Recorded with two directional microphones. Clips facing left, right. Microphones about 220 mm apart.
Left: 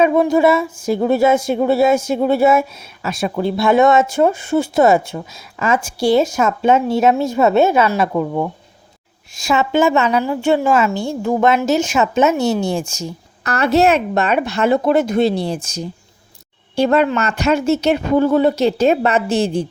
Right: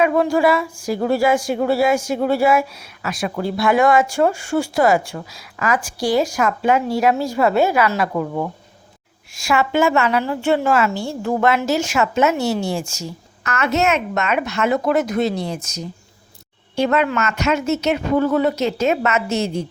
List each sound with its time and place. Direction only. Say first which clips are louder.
0.0 s speech: left 3 dB; 20° left (ahead or behind)
9.5 s speech: left 2 dB; 20° left (ahead or behind)
13.4 s a woman's voice: left 5 dB; 35° left (ahead or behind)